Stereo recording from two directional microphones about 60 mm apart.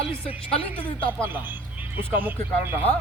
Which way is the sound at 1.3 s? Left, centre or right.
Right.